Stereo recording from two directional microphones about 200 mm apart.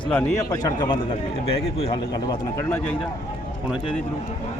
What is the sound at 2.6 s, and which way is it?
Speech, 10° left (ahead or behind).